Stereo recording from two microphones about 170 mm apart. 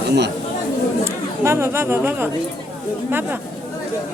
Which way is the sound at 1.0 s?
15° right (ahead or behind).